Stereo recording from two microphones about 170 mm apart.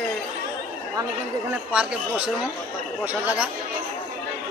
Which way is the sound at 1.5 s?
5° right (ahead or behind).